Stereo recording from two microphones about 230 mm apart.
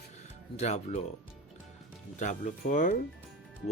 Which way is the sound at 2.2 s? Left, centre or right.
Left.